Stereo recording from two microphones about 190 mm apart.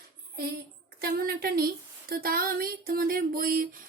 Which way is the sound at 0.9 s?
50° right (ahead or behind).